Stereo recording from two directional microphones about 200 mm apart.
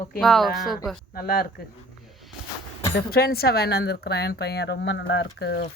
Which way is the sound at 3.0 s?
50° left (ahead or behind).